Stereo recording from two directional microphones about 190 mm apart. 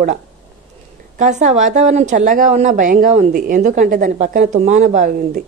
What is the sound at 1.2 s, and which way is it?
A woman's voice, 40° right (ahead or behind).